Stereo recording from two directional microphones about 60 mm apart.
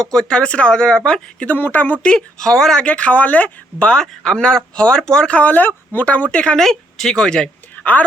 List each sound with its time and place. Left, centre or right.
0.1 s speech: centre
1.5 s speech: left
2.0 s speech: centre
3.8 s speech: centre
5.4 s speech: left
6.6 s speech: centre
7.9 s speech: left